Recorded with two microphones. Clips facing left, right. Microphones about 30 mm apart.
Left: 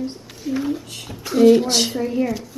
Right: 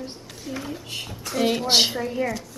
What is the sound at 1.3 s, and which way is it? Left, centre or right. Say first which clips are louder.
Speech: left 7 dB; centre.